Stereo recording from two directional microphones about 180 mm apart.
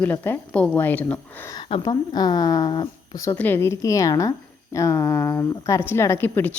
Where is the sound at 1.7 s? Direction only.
25° left (ahead or behind).